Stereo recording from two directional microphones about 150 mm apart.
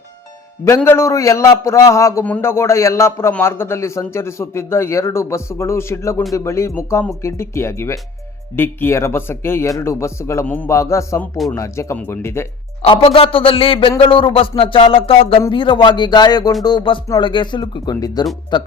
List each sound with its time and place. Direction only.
0.8 s a man's voice: 15° left (ahead or behind)
12.8 s music: 40° left (ahead or behind)
15.5 s speech: 35° left (ahead or behind)
16.6 s music: 30° left (ahead or behind)
18.5 s speech: 30° left (ahead or behind)